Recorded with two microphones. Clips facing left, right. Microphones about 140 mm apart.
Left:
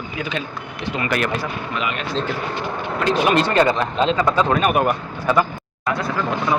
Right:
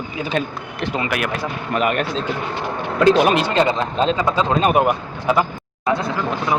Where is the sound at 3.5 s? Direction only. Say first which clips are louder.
Left 1 dB; 20° right (ahead or behind).